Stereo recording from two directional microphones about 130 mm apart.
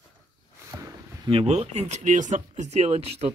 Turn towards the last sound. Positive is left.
turn(degrees=-55)  # may be behind; listen again after turning